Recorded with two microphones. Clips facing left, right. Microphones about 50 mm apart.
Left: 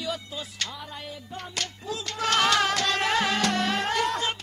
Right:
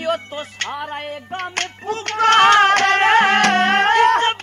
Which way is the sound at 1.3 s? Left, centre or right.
Right.